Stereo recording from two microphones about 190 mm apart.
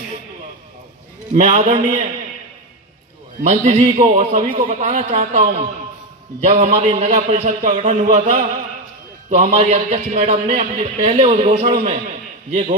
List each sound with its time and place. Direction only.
1.3 s a man's voice: 35° right (ahead or behind)
3.4 s a man's voice: 40° right (ahead or behind)
11.1 s a man's voice: 25° right (ahead or behind)